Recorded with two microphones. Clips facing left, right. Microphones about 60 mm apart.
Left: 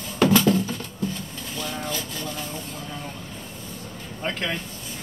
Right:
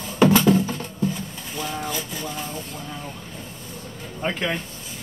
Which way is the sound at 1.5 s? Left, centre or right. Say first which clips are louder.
Right 2 dB; centre.